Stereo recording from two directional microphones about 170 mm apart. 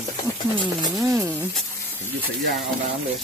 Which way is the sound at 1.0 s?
15° right (ahead or behind).